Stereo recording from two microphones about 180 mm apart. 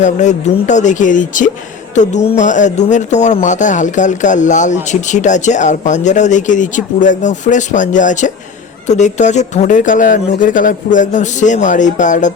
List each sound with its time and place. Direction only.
0.0 s speech: 40° left (ahead or behind)